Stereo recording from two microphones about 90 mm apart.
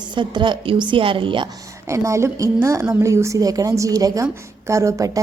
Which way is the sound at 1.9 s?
35° right (ahead or behind).